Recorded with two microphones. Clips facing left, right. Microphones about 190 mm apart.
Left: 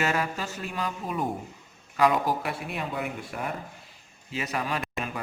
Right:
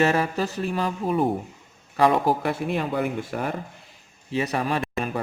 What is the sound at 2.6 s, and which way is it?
Speech, 40° right (ahead or behind).